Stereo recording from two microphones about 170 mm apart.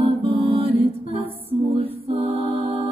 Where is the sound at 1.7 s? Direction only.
35° right (ahead or behind).